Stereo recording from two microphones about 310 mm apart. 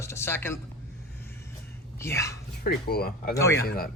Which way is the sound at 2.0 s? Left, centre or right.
Centre.